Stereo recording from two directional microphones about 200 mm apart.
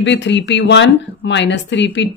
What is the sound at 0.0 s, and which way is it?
Speech, 65° left (ahead or behind).